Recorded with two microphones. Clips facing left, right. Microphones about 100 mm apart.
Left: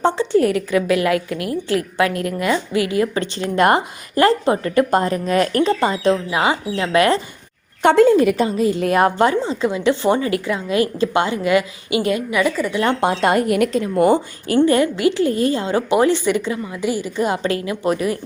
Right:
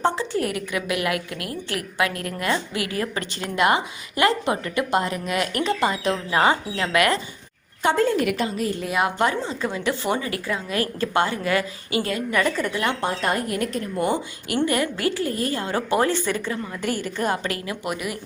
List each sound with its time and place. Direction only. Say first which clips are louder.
0.0 s a woman's voice: left 7 dB; 30° left (ahead or behind)
3.5 s speech: left 5 dB; 45° left (ahead or behind); by 6.1 s 30° left (ahead or behind)
6.3 s a woman's voice: left 1 dB; 10° left (ahead or behind); by 7.2 s 30° left (ahead or behind)
7.8 s a woman's voice: left 8 dB; 65° left (ahead or behind)
9.0 s speech: left 5 dB; 35° left (ahead or behind)
9.6 s a woman's voice: left 7 dB; 15° left (ahead or behind)
9.8 s a woman's voice: left 8 dB; 25° left (ahead or behind)
12.3 s a woman's voice: left 4 dB; 5° left (ahead or behind)
13.0 s a woman's voice: left 7 dB; 80° left
14.4 s a woman's voice: left 8 dB; 30° left (ahead or behind); by 17.4 s 15° left (ahead or behind)
17.4 s speech: left 8 dB; 30° left (ahead or behind)